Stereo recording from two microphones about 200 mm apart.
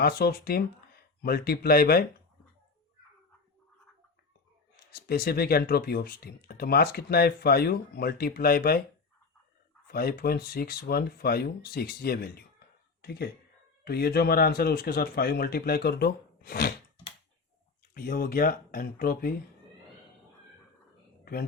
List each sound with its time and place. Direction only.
0.0 s speech: 50° left (ahead or behind)
4.9 s speech: 50° left (ahead or behind)
9.8 s speech: 50° left (ahead or behind)
17.9 s speech: 45° left (ahead or behind)